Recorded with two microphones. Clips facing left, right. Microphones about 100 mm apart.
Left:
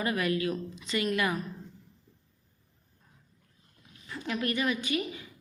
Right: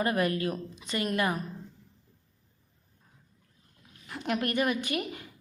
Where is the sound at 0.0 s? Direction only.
45° right (ahead or behind).